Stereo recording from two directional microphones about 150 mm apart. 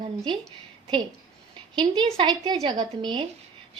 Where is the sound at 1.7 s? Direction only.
30° right (ahead or behind).